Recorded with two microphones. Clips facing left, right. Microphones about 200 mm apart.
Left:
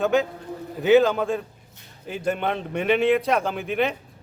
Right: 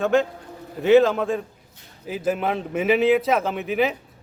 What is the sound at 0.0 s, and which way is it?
Speech, centre (ahead or behind).